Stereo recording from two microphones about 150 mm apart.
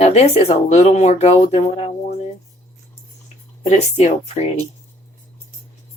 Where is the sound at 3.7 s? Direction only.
50° left (ahead or behind).